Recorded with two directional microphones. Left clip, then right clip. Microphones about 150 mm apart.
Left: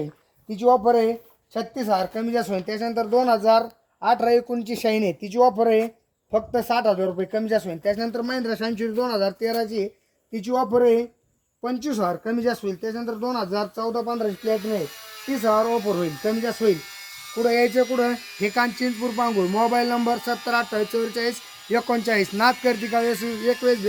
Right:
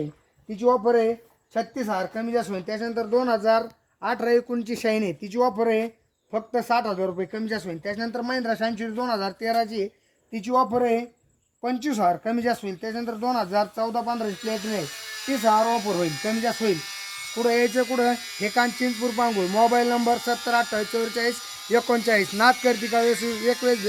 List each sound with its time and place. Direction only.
0.5 s speech: centre (ahead or behind); by 14.2 s 20° right (ahead or behind)
14.3 s speech: centre (ahead or behind); by 18.4 s 20° right (ahead or behind)
18.4 s speech: 5° left (ahead or behind)
18.9 s speech: 20° right (ahead or behind)
19.7 s speech: centre (ahead or behind)
20.8 s speech: 25° right (ahead or behind)
21.7 s speech: centre (ahead or behind)
23.1 s speech: 20° right (ahead or behind)